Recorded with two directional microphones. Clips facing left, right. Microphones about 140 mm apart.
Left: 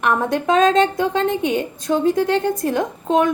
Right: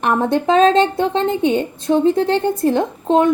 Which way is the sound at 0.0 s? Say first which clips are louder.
Right 3 dB; 30° right (ahead or behind).